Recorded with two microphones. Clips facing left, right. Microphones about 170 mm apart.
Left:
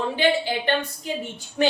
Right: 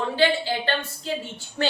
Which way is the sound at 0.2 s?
15° left (ahead or behind).